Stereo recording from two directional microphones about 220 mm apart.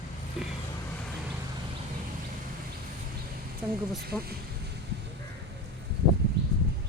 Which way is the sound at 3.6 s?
5° right (ahead or behind).